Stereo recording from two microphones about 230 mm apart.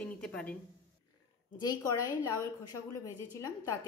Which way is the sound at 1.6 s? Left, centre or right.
Centre.